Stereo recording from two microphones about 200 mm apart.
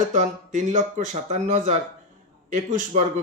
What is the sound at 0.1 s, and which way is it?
Speech, 35° right (ahead or behind).